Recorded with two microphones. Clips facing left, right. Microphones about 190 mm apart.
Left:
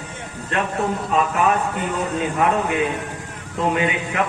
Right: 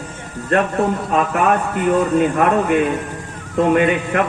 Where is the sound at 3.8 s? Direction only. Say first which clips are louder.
Right 6 dB; 55° right (ahead or behind).